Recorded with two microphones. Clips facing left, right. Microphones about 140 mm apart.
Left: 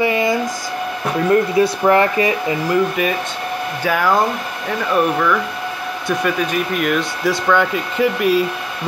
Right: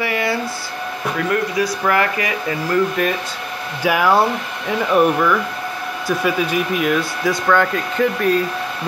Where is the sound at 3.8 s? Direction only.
10° right (ahead or behind).